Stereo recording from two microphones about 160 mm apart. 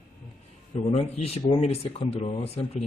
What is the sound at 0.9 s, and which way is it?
A man's voice, 40° left (ahead or behind).